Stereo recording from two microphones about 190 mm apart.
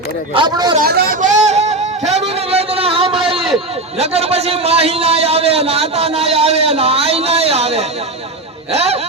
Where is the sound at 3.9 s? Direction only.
30° right (ahead or behind).